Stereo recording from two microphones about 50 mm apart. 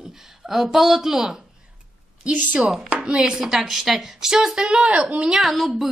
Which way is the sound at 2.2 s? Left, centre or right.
Right.